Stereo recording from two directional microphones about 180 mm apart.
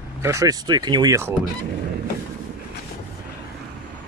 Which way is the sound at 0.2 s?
15° right (ahead or behind).